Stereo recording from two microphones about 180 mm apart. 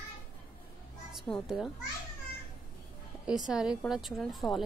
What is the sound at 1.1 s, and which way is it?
Speech, centre (ahead or behind).